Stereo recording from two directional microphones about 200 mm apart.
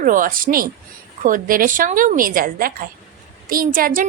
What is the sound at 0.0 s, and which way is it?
Speech, 40° right (ahead or behind).